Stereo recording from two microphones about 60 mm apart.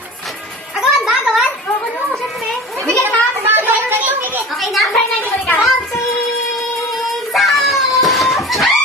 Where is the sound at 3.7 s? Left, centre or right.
Right.